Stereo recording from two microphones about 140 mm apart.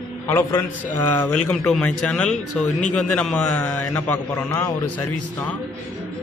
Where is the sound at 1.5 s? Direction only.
5° left (ahead or behind).